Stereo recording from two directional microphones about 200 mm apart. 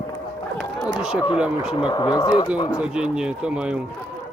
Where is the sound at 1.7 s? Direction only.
20° left (ahead or behind).